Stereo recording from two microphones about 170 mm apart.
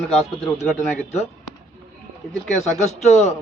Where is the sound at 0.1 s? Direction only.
Centre (ahead or behind).